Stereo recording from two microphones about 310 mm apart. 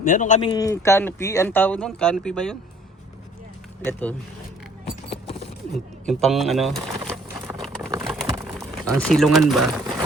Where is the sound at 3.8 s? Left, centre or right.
Centre.